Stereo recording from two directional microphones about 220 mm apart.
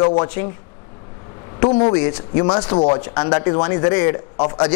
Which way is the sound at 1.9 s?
15° left (ahead or behind).